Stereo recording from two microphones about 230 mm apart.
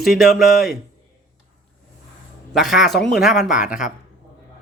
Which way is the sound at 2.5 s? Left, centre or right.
Centre.